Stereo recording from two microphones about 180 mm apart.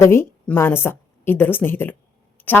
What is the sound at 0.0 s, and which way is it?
A woman's voice, 15° left (ahead or behind).